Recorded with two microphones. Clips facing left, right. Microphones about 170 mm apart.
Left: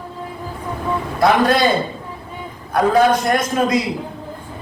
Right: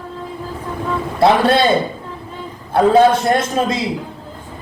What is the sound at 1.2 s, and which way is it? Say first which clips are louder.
Speech: right 2 dB; 30° right (ahead or behind).